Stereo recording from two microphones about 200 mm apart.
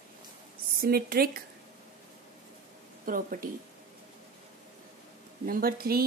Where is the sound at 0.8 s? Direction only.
50° right (ahead or behind).